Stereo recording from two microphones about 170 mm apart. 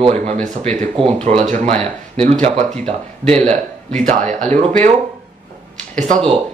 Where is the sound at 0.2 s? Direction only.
45° right (ahead or behind).